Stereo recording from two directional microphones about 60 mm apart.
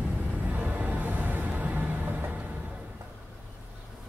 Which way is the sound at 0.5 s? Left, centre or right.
Right.